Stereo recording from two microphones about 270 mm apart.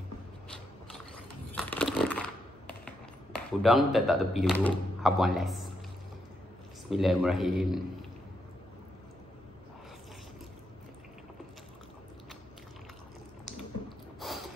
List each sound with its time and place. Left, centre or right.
1.5 s coin: centre
3.3 s speech: centre
6.9 s speech: centre
13.5 s a sound: centre